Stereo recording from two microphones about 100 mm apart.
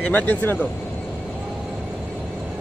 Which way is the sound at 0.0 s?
20° left (ahead or behind).